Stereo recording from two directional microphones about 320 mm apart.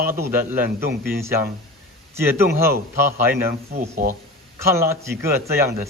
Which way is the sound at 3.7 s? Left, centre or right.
Right.